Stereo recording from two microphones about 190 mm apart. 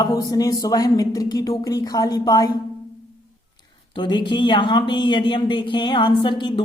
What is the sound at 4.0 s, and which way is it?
A woman's voice, 25° left (ahead or behind).